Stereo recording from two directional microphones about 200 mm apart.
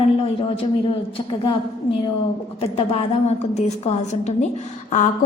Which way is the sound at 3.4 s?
35° left (ahead or behind).